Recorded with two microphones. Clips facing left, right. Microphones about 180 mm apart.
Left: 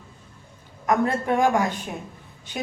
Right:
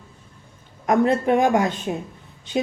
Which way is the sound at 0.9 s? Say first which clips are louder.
Right 4 dB; 20° right (ahead or behind).